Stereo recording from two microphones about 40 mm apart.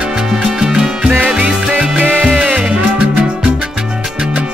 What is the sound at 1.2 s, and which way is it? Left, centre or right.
Music, right.